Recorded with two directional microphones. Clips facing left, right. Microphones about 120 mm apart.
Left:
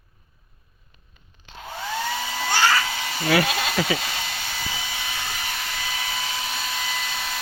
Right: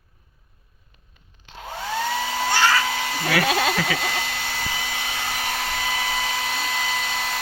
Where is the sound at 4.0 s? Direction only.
65° right (ahead or behind).